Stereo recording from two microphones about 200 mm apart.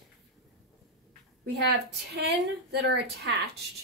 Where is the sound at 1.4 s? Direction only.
55° right (ahead or behind).